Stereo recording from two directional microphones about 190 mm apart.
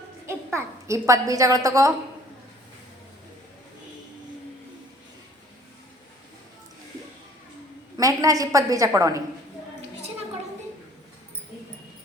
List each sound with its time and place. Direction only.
0.3 s a child's voice: 15° right (ahead or behind)
7.9 s a woman's voice: 20° right (ahead or behind)